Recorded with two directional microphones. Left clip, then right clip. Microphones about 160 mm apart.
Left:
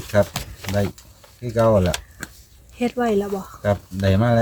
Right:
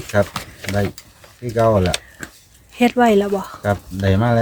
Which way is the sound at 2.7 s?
40° right (ahead or behind).